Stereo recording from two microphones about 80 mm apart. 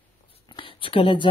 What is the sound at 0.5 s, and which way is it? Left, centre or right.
Speech, left.